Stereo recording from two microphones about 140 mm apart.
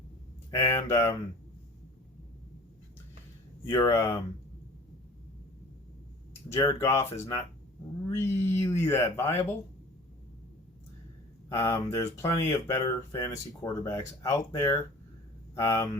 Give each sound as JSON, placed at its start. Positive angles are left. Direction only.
{"t": 0.5, "sound": "speech", "side_deg": 20}
{"t": 3.7, "sound": "speech", "side_deg": 20}
{"t": 6.5, "sound": "speech", "side_deg": 20}
{"t": 11.4, "sound": "speech", "side_deg": 20}